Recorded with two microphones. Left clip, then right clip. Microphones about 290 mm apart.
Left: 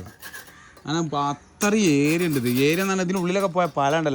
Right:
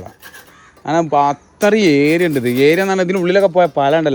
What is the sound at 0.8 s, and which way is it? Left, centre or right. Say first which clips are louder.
Speech: right 11 dB; right.